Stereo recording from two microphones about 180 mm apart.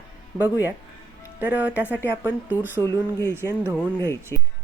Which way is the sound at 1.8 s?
10° left (ahead or behind).